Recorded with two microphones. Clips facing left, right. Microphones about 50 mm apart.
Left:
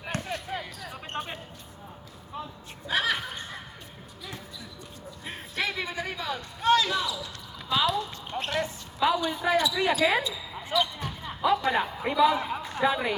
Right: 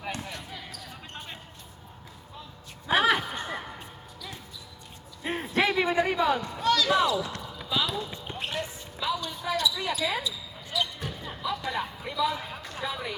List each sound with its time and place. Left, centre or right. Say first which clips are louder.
0.1 s basketball bounce: left 7 dB; left
1.2 s a sound: left 9 dB; left
2.8 s a sound: right 4 dB; right
5.2 s a sound: right 6 dB; right
6.6 s basketball bounce: left 5 dB; left
6.9 s basketball bounce: right 6 dB; right
7.6 s clip-clop: left 4 dB; centre
7.9 s basketball bounce: left 3 dB; centre
9.0 s basketball bounce: left 6 dB; centre
9.4 s speech: left 4 dB; left
10.8 s basketball bounce: left 3 dB; centre
11.4 s a man's voice: left 7 dB; left
12.4 s speech: left 7 dB; left
12.8 s speech: left 8 dB; left